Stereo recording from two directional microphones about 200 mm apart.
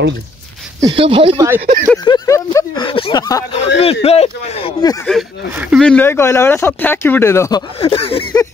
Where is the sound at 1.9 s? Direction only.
20° left (ahead or behind).